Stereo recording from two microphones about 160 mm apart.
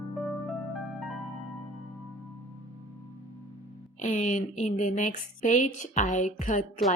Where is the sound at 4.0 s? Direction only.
50° left (ahead or behind).